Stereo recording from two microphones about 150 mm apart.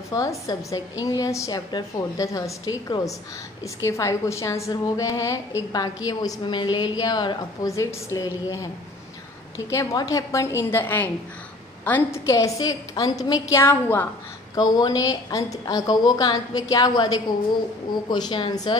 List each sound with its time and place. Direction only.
0.1 s a woman's voice: 25° left (ahead or behind)
9.7 s a woman's voice: 20° left (ahead or behind)
14.5 s a woman's voice: 25° left (ahead or behind)